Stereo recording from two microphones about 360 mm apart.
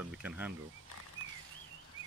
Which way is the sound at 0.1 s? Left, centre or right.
Centre.